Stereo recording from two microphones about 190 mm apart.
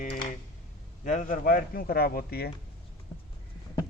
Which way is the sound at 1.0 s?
45° left (ahead or behind).